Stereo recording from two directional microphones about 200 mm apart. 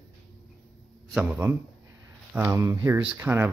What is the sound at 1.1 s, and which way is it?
Speech, 10° right (ahead or behind).